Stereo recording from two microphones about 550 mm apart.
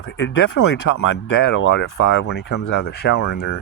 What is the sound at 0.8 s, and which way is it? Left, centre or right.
Speech, left.